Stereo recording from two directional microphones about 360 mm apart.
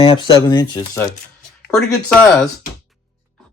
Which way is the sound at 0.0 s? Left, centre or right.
Centre.